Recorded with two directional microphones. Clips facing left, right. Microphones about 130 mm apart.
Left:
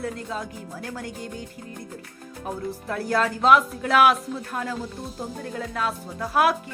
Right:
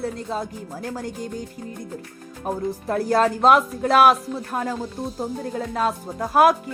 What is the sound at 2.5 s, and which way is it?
Speech, 40° right (ahead or behind).